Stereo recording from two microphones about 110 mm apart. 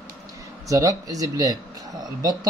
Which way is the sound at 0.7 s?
30° right (ahead or behind).